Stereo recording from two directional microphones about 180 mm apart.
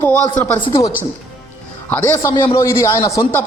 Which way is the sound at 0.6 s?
30° left (ahead or behind).